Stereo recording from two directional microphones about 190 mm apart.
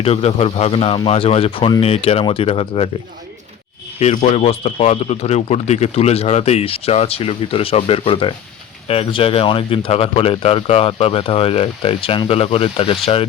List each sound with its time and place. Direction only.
0.0 s speech: 30° left (ahead or behind)
4.0 s speech: 35° left (ahead or behind)